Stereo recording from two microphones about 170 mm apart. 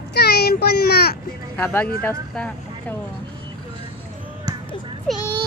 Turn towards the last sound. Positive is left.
turn(degrees=0)  # may be behind; listen again after turning